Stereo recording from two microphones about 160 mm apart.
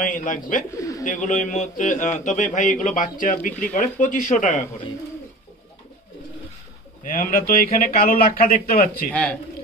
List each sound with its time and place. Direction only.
0.0 s a man's voice: 55° left (ahead or behind)
0.7 s speech: 20° left (ahead or behind)
1.0 s a man's voice: 50° left (ahead or behind)
7.1 s speech: 60° left (ahead or behind)
9.1 s speech: 5° left (ahead or behind)